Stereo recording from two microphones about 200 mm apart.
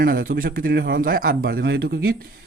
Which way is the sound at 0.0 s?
45° right (ahead or behind).